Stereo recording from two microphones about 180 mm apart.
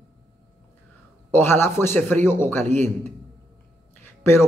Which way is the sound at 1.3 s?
10° left (ahead or behind).